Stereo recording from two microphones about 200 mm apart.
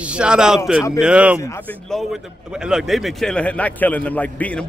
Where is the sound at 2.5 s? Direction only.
5° right (ahead or behind).